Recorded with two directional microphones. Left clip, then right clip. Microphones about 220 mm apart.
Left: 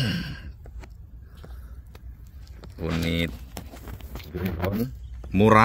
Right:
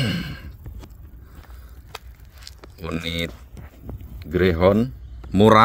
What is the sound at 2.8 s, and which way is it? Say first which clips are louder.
Speech: right 1 dB; 30° right (ahead or behind).